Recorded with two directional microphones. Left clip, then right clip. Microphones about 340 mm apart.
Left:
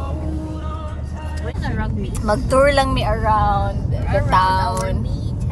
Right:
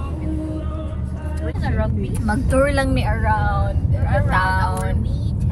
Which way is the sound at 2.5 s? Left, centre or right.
Centre.